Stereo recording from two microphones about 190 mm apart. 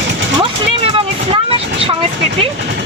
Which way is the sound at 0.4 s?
30° right (ahead or behind).